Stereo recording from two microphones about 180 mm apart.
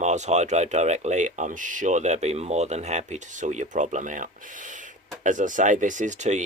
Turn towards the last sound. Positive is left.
turn(degrees=-40)  # may be behind; listen again after turning